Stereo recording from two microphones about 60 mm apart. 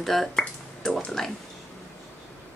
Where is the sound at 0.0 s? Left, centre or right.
Centre.